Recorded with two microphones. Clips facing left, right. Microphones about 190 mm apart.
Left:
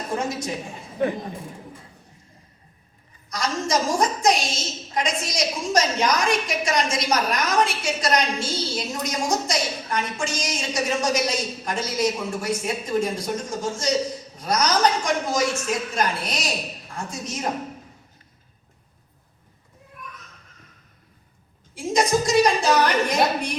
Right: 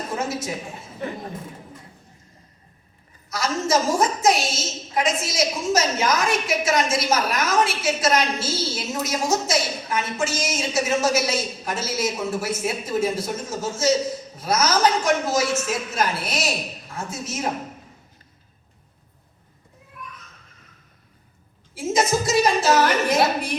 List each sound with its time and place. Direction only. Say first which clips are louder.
0.2 s a woman's voice: even; 5° right (ahead or behind)
3.2 s a woman's voice: right 2 dB; 5° right (ahead or behind)
21.8 s a woman's voice: even; 5° right (ahead or behind)